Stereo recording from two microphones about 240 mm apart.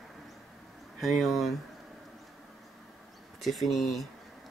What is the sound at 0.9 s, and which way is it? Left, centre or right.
Speech, centre.